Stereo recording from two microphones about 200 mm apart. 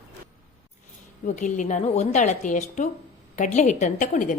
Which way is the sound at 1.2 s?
40° left (ahead or behind).